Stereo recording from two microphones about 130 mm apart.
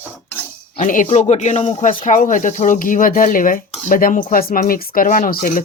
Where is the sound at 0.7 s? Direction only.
85° left.